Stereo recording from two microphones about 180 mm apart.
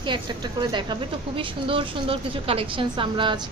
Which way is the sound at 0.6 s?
25° right (ahead or behind).